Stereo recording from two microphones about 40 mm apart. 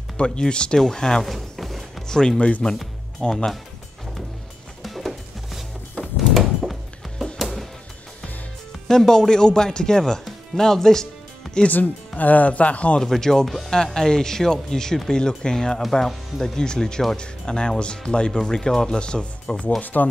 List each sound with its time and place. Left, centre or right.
0.2 s speech: left
0.7 s speech: centre
1.2 s music: centre
2.0 s speech: centre
4.8 s music: centre
8.8 s speech: centre
11.6 s speech: left
13.0 s speech: centre
16.1 s speech: centre
16.5 s speech: centre
19.8 s speech: left